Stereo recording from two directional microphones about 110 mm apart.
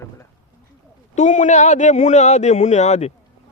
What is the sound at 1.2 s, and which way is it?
A man's voice, 90° left.